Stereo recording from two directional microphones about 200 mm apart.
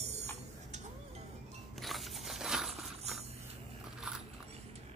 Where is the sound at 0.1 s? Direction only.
35° right (ahead or behind).